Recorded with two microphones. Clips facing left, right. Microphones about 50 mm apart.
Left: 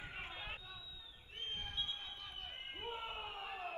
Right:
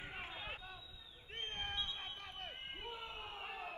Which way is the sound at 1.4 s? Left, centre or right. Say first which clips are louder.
Right 1 dB; right.